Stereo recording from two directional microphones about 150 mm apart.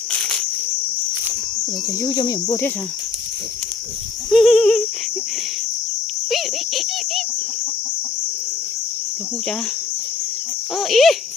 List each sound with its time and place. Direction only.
0.1 s insect: 5° left (ahead or behind)
2.0 s speech: 30° left (ahead or behind)
4.3 s a sound: centre (ahead or behind)
6.3 s insect: centre (ahead or behind)
10.8 s speech: centre (ahead or behind)